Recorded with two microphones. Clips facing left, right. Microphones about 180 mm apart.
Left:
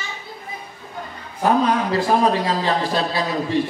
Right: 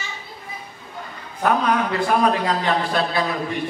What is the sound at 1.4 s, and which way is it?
A man's voice, 30° left (ahead or behind).